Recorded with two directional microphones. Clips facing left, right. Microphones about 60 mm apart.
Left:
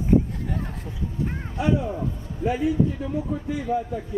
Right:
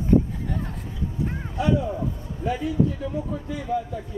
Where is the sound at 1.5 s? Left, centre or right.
Left.